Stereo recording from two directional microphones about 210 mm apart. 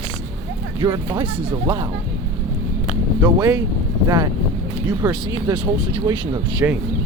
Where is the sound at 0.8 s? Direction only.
20° right (ahead or behind).